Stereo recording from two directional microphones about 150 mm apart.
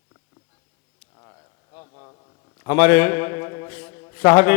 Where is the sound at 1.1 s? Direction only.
25° left (ahead or behind).